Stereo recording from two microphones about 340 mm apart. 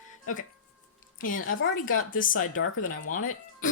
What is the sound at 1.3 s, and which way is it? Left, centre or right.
Speech, left.